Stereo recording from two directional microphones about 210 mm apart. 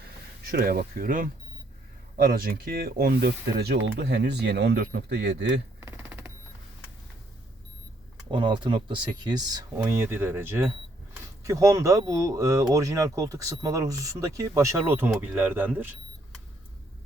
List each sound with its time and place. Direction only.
0.4 s speech: 45° right (ahead or behind)
5.8 s a sound: 10° right (ahead or behind)
8.3 s speech: 25° right (ahead or behind)